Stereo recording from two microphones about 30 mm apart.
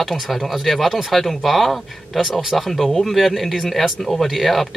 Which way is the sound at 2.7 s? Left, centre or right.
Centre.